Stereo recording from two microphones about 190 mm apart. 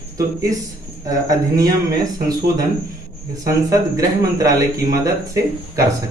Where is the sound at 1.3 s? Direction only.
20° right (ahead or behind).